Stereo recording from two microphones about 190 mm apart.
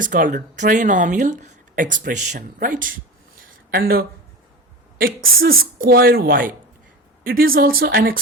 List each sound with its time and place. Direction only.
0.0 s speech: 45° right (ahead or behind)
5.4 s speech: 50° right (ahead or behind)